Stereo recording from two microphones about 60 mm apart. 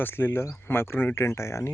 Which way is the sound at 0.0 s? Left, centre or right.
Left.